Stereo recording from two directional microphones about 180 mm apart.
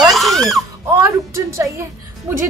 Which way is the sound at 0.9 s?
15° right (ahead or behind).